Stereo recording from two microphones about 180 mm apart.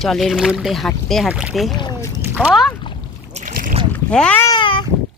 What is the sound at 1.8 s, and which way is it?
Rowboat, 25° left (ahead or behind).